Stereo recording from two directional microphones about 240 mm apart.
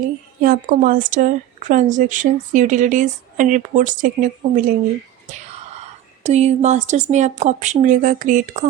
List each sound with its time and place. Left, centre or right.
0.4 s a woman's voice: right
6.2 s speech: right